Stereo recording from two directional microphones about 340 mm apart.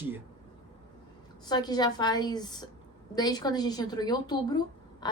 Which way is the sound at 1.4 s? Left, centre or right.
Centre.